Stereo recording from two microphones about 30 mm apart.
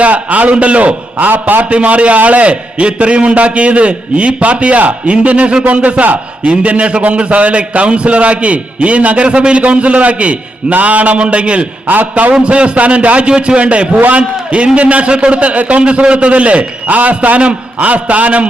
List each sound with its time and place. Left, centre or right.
0.0 s a man's voice: right
0.5 s a man's voice: right
1.3 s a man's voice: right
1.7 s a man's voice: right
11.2 s a man's voice: right
13.2 s a man's voice: right
15.8 s a man's voice: right
16.8 s a man's voice: right
17.7 s a man's voice: right